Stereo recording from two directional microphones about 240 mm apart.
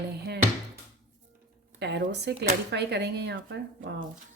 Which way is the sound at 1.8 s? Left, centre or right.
Right.